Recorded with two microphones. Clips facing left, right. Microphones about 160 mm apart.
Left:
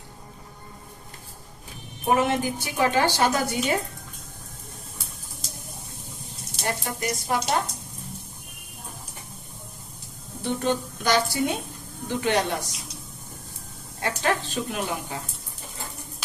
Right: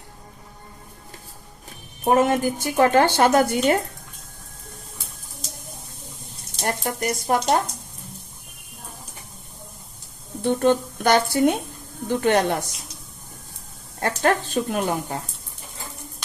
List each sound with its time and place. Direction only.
2.0 s a woman's voice: 45° right (ahead or behind)
6.7 s a woman's voice: 45° right (ahead or behind)
10.4 s a woman's voice: 50° right (ahead or behind)
14.0 s a woman's voice: 50° right (ahead or behind)